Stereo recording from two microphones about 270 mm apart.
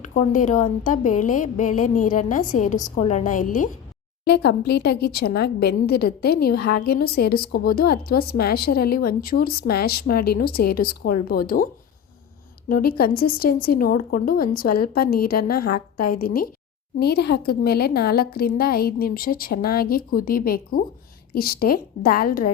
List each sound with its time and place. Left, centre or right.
0.1 s a woman's voice: left